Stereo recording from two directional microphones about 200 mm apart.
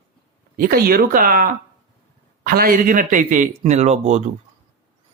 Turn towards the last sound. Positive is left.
turn(degrees=-35)  # may be behind; listen again after turning